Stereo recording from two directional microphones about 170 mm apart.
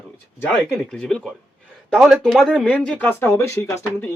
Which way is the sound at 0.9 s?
5° left (ahead or behind).